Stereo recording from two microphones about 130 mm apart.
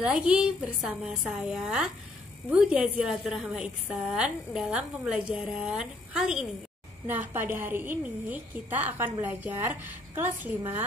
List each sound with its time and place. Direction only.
0.0 s a woman's voice: 10° right (ahead or behind)